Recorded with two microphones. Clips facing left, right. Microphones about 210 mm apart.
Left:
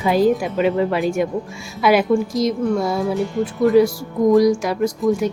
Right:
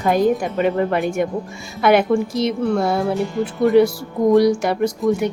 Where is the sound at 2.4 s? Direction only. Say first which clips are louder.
Even; 65° right (ahead or behind).